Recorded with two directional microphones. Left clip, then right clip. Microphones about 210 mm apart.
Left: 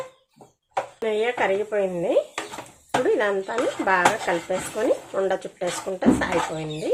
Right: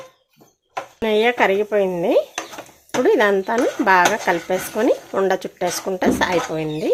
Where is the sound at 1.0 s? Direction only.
50° right (ahead or behind).